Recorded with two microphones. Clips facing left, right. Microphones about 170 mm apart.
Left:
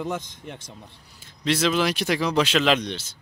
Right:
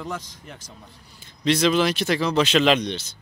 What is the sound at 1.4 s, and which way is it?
Speech, 5° left (ahead or behind).